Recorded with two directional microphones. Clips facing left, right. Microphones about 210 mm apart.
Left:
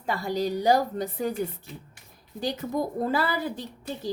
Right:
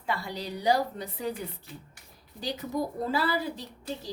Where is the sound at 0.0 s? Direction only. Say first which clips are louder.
Left 7 dB; 40° left (ahead or behind).